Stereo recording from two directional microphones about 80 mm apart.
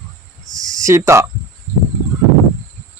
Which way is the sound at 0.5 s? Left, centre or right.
Right.